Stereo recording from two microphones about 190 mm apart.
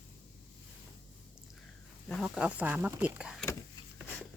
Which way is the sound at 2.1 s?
5° right (ahead or behind).